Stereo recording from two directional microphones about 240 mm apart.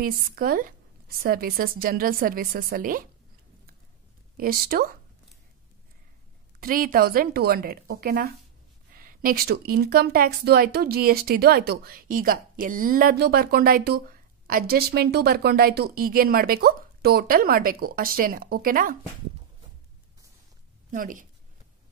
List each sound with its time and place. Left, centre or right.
0.0 s speech: right
4.4 s speech: right
6.6 s speech: right
20.9 s speech: right